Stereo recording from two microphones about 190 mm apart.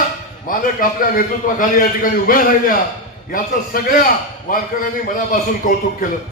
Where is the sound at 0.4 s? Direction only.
45° left (ahead or behind).